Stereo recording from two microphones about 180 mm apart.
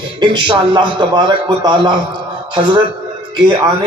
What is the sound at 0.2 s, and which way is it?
A man's voice, 25° right (ahead or behind).